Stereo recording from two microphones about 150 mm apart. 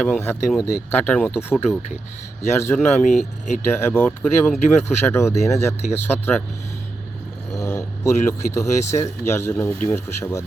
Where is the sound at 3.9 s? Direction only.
10° left (ahead or behind).